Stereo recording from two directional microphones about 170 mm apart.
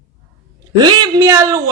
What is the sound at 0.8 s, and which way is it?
Speech, 20° right (ahead or behind).